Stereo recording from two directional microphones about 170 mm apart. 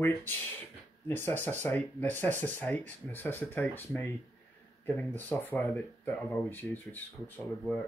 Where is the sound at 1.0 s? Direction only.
10° left (ahead or behind).